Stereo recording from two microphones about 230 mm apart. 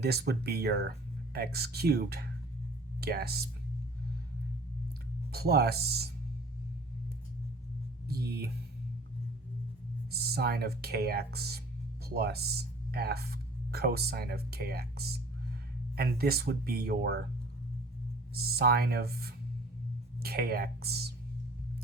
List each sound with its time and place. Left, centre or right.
0.0 s speech: right
5.3 s speech: right
8.0 s speech: right
10.1 s speech: right
18.3 s speech: right